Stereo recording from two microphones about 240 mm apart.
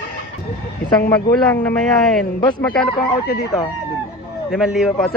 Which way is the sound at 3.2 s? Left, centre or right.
Left.